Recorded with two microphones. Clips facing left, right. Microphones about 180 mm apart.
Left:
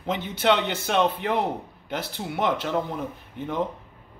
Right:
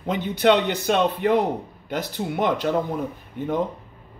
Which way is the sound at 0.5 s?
15° right (ahead or behind).